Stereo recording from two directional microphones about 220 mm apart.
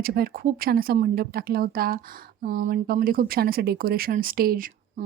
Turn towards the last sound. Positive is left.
turn(degrees=-40)  # may be behind; listen again after turning